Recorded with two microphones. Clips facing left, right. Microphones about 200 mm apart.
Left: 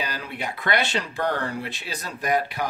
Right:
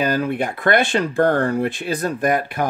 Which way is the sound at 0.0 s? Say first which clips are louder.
Right 11 dB; 50° right (ahead or behind).